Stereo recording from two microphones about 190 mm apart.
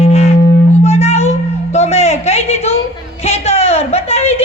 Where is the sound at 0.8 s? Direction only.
35° left (ahead or behind).